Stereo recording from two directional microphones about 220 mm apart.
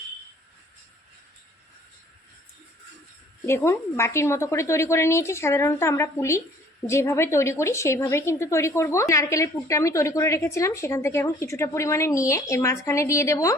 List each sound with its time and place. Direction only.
3.4 s a woman's voice: 10° left (ahead or behind)